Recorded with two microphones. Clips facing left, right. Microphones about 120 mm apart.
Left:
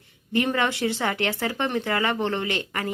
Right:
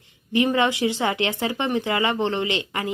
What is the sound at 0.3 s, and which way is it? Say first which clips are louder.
A woman's voice: right 3 dB; 15° right (ahead or behind).